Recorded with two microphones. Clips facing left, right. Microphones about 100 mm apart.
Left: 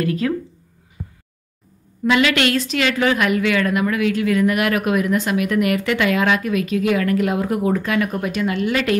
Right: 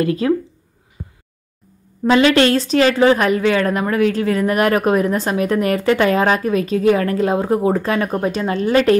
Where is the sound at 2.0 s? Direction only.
30° right (ahead or behind).